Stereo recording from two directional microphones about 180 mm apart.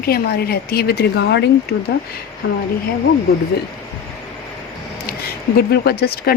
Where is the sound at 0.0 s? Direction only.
60° left (ahead or behind).